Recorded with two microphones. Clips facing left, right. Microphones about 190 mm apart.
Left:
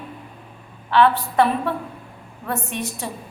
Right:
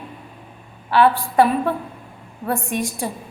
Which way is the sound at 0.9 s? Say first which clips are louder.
Right 1 dB; 10° right (ahead or behind).